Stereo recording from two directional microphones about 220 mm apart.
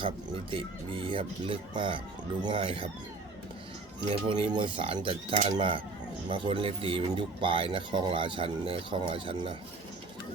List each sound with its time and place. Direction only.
0.0 s speech: 25° right (ahead or behind)
4.1 s speech: 25° right (ahead or behind)